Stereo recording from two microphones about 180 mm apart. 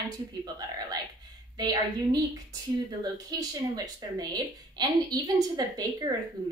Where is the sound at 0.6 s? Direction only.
20° right (ahead or behind).